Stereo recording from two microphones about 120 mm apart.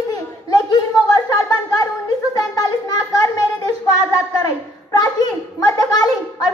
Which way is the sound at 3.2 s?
30° left (ahead or behind).